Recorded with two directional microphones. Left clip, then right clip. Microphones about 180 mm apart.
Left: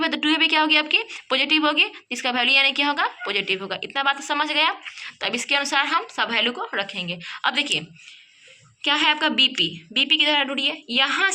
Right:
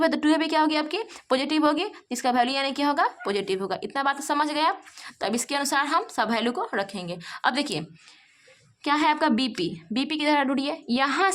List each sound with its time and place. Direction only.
0.0 s a woman's voice: 45° right (ahead or behind)